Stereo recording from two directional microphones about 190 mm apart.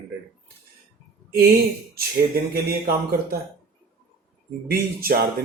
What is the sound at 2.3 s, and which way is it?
Speech, 55° right (ahead or behind).